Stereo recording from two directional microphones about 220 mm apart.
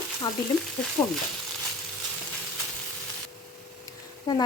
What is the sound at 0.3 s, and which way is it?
Speech, 20° left (ahead or behind).